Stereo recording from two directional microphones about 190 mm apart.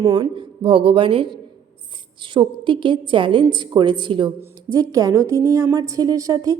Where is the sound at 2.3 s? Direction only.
25° right (ahead or behind).